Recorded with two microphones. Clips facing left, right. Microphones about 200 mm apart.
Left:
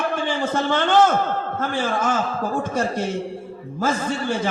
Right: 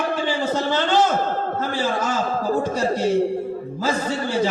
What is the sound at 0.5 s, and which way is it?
A man's voice, 55° left (ahead or behind).